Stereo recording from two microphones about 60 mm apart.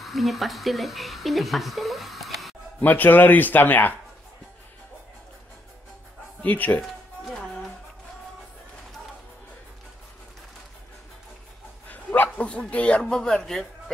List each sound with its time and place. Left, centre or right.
0.0 s speech: centre
2.8 s speech: left
6.4 s speech: left
7.3 s music: centre
11.9 s dog: left
12.4 s speech: centre